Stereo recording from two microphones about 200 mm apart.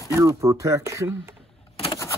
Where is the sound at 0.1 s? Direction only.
15° right (ahead or behind).